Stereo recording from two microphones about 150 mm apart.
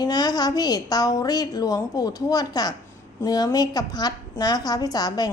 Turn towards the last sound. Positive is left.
turn(degrees=25)  # may be behind; listen again after turning